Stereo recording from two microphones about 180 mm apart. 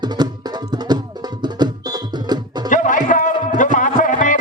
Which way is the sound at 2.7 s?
45° left (ahead or behind).